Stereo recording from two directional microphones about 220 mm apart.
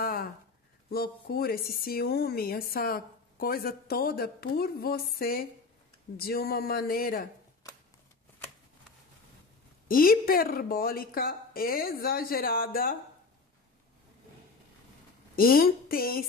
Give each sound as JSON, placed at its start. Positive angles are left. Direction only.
{"t": 0.0, "sound": "a sound", "side_deg": 40}
{"t": 0.8, "sound": "speech", "side_deg": 45}
{"t": 9.8, "sound": "a woman's voice", "side_deg": 40}
{"t": 15.3, "sound": "a woman's voice", "side_deg": 40}